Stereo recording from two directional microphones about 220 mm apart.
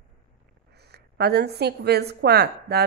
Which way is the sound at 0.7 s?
50° right (ahead or behind).